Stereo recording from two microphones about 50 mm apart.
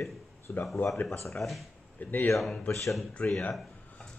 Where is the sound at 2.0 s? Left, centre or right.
Left.